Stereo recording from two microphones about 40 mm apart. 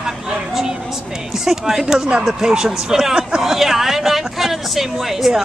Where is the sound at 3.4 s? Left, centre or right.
Centre.